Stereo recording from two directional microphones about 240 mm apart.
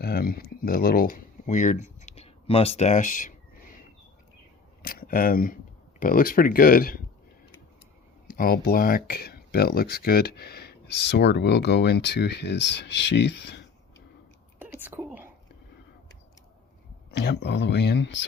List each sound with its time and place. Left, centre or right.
0.0 s speech: left
4.8 s a sound: left
6.0 s speech: left
8.4 s speech: left
14.6 s whispering: centre
17.1 s speech: left